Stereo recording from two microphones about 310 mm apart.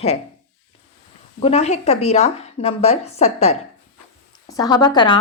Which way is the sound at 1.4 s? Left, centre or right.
Centre.